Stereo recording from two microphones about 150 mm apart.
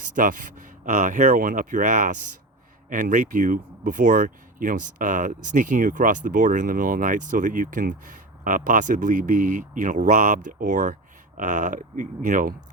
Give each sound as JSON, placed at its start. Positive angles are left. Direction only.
{"t": 0.2, "sound": "speech", "side_deg": -60}